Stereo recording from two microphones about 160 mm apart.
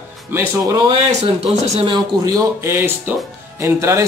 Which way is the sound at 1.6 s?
40° right (ahead or behind).